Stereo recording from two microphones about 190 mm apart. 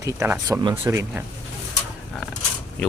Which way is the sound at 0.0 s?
15° right (ahead or behind).